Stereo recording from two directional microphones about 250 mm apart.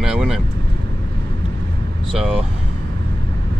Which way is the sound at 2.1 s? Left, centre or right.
Centre.